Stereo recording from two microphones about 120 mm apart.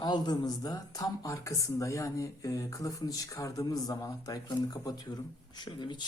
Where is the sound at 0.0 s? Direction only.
35° left (ahead or behind).